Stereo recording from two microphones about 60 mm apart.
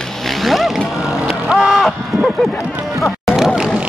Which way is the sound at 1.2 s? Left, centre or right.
Centre.